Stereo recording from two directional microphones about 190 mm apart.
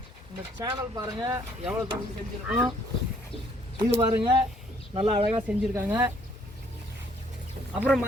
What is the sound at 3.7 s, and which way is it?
Speech, 25° right (ahead or behind).